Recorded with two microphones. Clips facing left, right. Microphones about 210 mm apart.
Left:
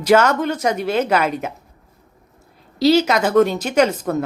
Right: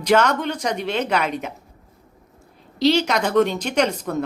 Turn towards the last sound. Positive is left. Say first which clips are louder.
# left 4 dB
turn(degrees=5)  # may be behind; listen again after turning